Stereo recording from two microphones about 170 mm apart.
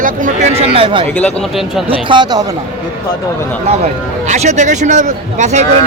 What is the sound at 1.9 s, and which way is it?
Speech, 30° right (ahead or behind).